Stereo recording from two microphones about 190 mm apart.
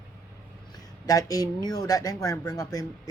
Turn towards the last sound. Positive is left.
turn(degrees=20)  # may be behind; listen again after turning